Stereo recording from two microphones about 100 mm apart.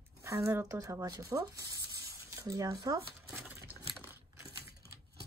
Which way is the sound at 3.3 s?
20° right (ahead or behind).